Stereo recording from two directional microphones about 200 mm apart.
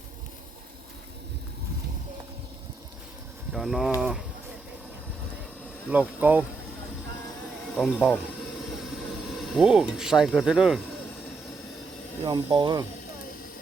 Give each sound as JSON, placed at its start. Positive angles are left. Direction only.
{"t": 3.5, "sound": "speech", "side_deg": 0}
{"t": 5.9, "sound": "speech", "side_deg": -10}
{"t": 7.8, "sound": "speech", "side_deg": 0}
{"t": 9.3, "sound": "speech", "side_deg": 0}
{"t": 12.2, "sound": "speech", "side_deg": -25}